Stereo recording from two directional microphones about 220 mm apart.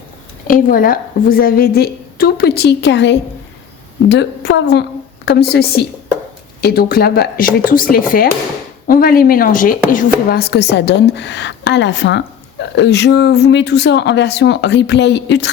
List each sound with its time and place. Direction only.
0.4 s a woman's voice: 40° left (ahead or behind)